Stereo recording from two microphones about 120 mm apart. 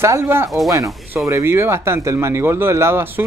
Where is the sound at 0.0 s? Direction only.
20° right (ahead or behind).